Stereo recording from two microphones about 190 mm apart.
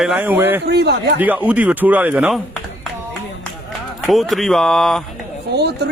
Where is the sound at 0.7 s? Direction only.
60° right (ahead or behind).